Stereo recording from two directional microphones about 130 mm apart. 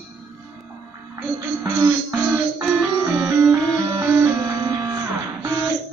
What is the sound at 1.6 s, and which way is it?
Music, 20° right (ahead or behind).